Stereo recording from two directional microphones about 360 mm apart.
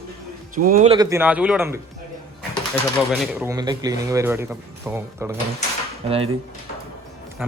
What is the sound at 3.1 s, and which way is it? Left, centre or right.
Speech, centre.